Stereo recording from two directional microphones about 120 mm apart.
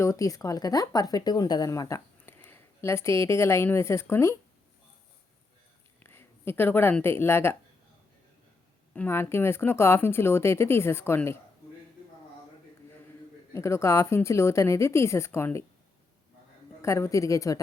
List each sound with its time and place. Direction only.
0.0 s a woman's voice: 25° left (ahead or behind)
6.0 s speech: 20° left (ahead or behind)
8.9 s speech: 15° left (ahead or behind)
13.5 s speech: 25° left (ahead or behind)
16.8 s speech: 25° left (ahead or behind)